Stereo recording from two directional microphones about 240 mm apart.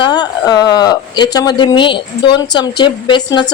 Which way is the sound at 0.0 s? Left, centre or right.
Centre.